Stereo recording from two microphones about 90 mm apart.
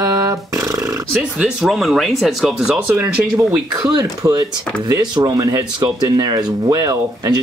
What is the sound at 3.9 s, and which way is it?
Speech, 50° right (ahead or behind).